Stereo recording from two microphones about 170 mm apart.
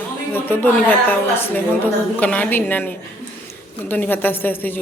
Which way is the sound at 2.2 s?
10° left (ahead or behind).